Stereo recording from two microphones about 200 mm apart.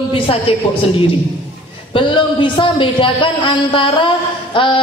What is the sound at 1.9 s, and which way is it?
A woman's voice, 25° left (ahead or behind).